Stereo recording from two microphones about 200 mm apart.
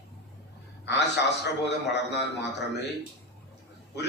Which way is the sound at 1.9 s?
60° left (ahead or behind).